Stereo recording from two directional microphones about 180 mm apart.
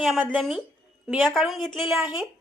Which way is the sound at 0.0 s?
Centre (ahead or behind).